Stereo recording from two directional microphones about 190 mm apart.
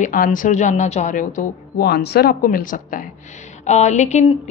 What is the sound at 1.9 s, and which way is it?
Speech, 55° left (ahead or behind).